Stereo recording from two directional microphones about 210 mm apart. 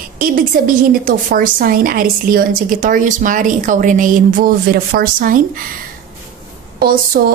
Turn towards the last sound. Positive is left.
turn(degrees=-45)  # may be behind; listen again after turning